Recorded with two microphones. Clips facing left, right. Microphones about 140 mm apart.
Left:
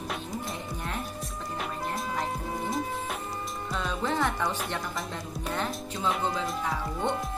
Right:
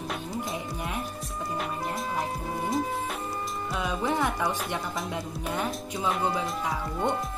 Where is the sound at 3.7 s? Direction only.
10° right (ahead or behind).